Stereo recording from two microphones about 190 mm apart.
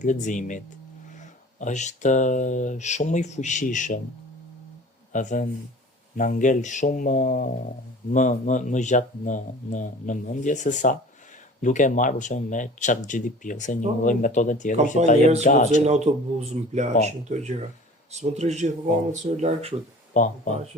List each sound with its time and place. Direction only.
0.0 s speech: 40° left (ahead or behind)
5.1 s speech: 40° left (ahead or behind)
15.2 s speech: 35° right (ahead or behind)
15.4 s speech: 40° left (ahead or behind)
15.8 s speech: 35° right (ahead or behind)
20.1 s speech: 40° left (ahead or behind)